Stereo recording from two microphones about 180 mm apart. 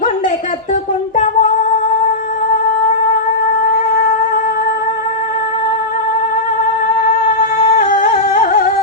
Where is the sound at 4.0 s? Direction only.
55° left (ahead or behind).